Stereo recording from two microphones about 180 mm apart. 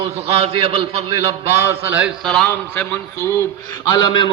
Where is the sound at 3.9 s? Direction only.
25° left (ahead or behind).